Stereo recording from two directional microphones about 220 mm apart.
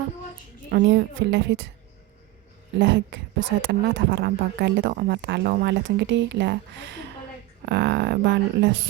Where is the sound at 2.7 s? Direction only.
55° right (ahead or behind).